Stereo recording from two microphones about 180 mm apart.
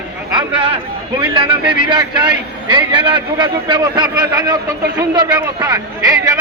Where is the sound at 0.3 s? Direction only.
30° right (ahead or behind).